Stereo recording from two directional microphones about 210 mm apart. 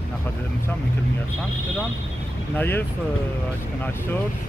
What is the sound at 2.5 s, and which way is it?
Speech, 10° left (ahead or behind).